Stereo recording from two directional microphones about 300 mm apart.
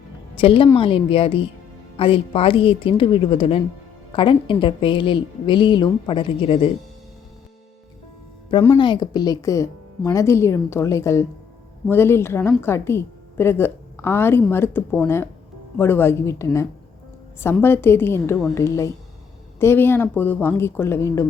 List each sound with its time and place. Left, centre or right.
0.3 s a woman's voice: centre
8.4 s a woman's voice: centre